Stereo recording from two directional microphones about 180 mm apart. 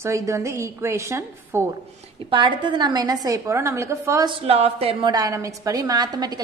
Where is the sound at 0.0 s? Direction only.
15° right (ahead or behind).